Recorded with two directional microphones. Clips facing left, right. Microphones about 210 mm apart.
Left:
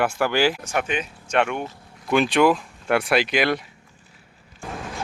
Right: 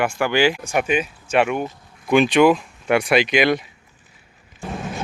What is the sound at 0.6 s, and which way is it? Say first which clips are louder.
Speech: right 5 dB; 10° right (ahead or behind).